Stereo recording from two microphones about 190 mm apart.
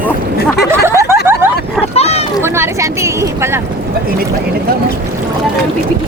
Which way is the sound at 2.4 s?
15° right (ahead or behind).